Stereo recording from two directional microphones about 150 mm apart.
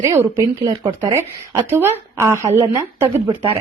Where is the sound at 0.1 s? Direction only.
20° right (ahead or behind).